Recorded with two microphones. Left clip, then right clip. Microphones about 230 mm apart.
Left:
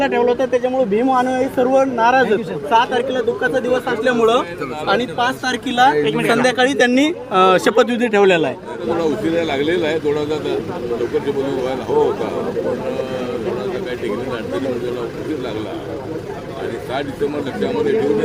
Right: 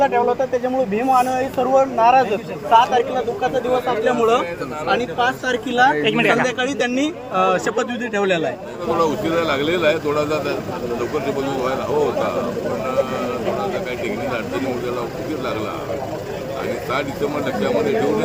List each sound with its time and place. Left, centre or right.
0.0 s speech: left
6.0 s speech: centre
6.3 s speech: left
9.0 s speech: centre